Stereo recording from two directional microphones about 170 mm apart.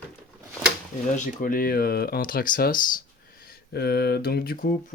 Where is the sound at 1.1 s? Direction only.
55° left (ahead or behind).